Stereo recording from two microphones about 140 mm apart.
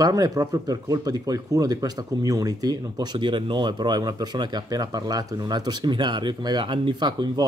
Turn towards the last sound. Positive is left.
turn(degrees=-30)  # may be behind; listen again after turning